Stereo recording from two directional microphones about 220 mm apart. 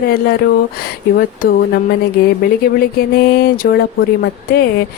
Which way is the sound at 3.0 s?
45° left (ahead or behind).